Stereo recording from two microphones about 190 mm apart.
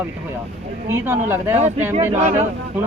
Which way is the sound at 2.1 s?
35° right (ahead or behind).